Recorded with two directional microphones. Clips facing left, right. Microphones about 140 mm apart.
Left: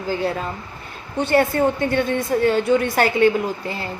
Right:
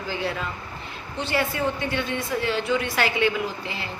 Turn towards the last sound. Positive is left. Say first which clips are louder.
# left 5 dB
turn(degrees=40)  # may be behind; listen again after turning